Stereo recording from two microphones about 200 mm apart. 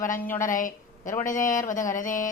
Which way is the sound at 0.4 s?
40° left (ahead or behind).